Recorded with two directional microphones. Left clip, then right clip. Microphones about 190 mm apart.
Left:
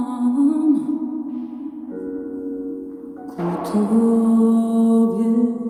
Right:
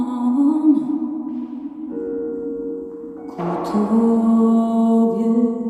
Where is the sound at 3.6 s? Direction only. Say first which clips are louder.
Right 1 dB; 25° left (ahead or behind).